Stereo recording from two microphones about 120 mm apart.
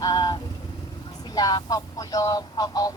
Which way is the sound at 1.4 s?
35° left (ahead or behind).